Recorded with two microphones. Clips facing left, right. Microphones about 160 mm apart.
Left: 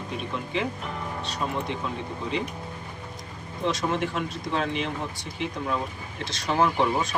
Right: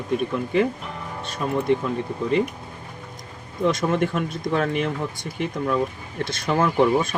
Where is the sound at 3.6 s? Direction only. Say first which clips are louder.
Right 5 dB; 50° right (ahead or behind).